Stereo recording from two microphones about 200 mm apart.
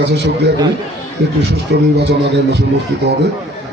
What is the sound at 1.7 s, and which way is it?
Speech, 60° right (ahead or behind).